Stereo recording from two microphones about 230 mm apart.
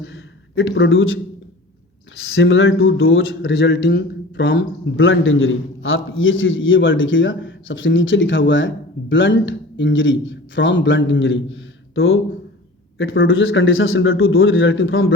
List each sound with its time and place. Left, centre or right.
0.0 s a man's voice: left